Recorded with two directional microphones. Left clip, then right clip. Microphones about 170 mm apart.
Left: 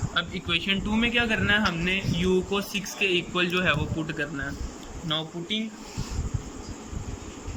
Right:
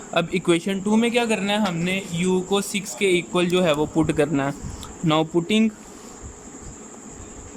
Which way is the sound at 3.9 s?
40° right (ahead or behind).